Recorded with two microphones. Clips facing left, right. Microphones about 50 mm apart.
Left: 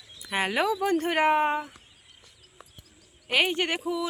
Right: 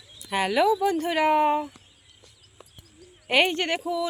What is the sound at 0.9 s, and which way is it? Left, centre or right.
Speech, left.